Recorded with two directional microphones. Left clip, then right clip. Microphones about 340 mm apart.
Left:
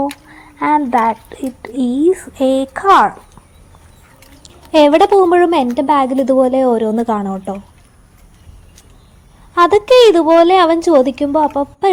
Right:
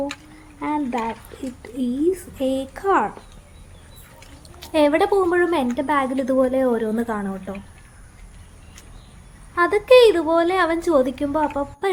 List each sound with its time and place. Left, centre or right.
0.6 s a woman's voice: centre
4.7 s a woman's voice: centre
9.6 s a woman's voice: centre